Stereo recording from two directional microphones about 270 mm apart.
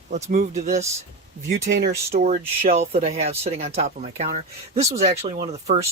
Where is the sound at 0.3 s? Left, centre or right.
Right.